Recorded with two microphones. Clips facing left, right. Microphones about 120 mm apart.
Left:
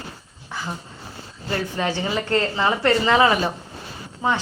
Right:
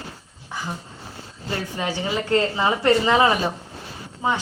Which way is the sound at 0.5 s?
15° right (ahead or behind).